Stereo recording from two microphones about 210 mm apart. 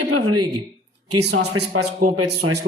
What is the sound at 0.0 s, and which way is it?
Speech, 90° right.